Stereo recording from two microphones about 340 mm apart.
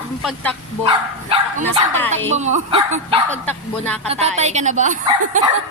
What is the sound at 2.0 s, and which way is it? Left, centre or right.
Speech, centre.